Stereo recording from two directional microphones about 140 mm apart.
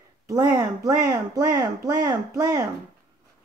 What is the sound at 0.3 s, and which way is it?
Speech, 25° right (ahead or behind).